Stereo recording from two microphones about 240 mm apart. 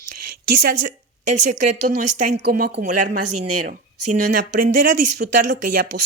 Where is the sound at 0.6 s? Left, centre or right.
Right.